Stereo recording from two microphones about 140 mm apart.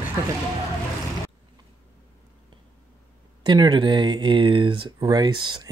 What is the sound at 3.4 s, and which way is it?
Speech, 30° right (ahead or behind).